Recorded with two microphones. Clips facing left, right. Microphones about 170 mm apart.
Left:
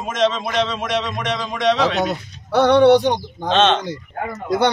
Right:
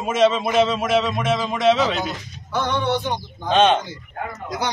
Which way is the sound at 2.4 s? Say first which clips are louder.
Left 11 dB; 70° left (ahead or behind).